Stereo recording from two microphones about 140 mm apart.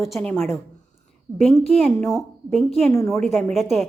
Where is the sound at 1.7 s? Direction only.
10° left (ahead or behind).